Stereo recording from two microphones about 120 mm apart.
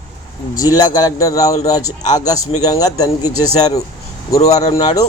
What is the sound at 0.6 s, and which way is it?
Speech, 30° left (ahead or behind).